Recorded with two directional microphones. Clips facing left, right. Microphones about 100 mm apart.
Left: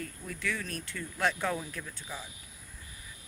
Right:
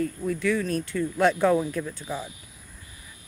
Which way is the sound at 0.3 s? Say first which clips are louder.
Right 11 dB; 25° right (ahead or behind).